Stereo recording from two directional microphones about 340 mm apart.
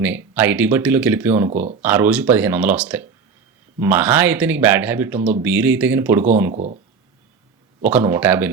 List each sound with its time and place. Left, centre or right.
0.3 s speech: centre
6.5 s speech: centre
7.8 s speech: centre